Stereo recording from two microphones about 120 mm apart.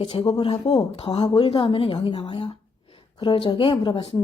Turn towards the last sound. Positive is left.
turn(degrees=40)  # may be behind; listen again after turning